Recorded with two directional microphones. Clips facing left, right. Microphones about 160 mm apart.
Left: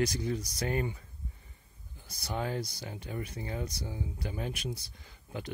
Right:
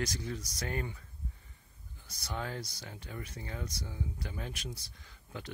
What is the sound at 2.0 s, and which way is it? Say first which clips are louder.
Speech: left 5 dB; 15° left (ahead or behind).